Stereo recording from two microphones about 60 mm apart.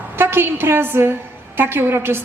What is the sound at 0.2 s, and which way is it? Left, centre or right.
A woman's voice, right.